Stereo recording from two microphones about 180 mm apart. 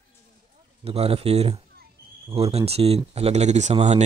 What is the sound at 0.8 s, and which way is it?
Speech, 35° right (ahead or behind).